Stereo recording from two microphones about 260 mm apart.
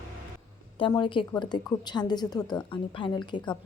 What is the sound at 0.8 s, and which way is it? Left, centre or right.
A woman's voice, centre.